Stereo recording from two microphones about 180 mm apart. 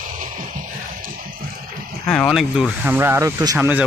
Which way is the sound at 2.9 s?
15° right (ahead or behind).